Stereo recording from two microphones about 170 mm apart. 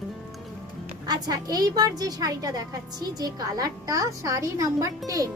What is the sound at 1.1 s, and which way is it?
Speech, 25° right (ahead or behind).